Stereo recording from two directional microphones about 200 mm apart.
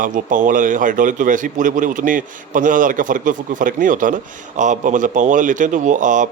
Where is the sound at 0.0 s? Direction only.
40° right (ahead or behind).